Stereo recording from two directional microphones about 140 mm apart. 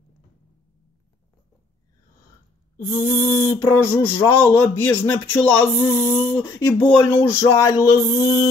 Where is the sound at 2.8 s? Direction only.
20° left (ahead or behind).